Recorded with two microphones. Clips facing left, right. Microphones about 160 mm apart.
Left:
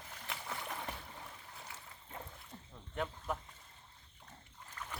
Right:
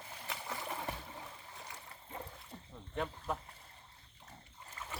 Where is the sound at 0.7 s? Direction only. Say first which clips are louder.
Right 4 dB; 20° right (ahead or behind).